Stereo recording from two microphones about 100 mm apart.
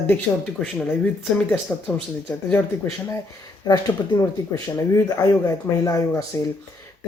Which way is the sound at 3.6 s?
40° left (ahead or behind).